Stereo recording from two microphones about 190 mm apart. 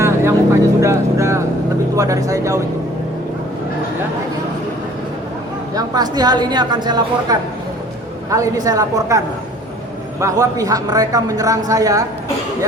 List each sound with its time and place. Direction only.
0.0 s vehicle: 15° right (ahead or behind)
2.0 s a woman's voice: 15° right (ahead or behind)
5.7 s a woman's voice: 20° right (ahead or behind)